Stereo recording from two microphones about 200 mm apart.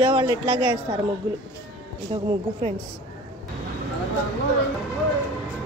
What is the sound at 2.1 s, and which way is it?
Speech, 25° right (ahead or behind).